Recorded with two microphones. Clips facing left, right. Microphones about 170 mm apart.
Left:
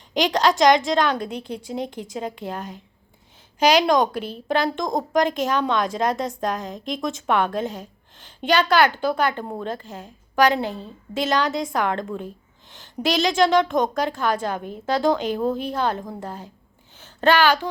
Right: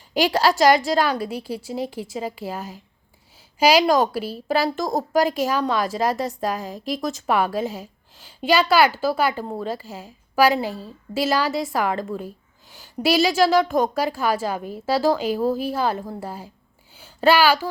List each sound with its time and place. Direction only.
0.1 s a woman's voice: 5° right (ahead or behind)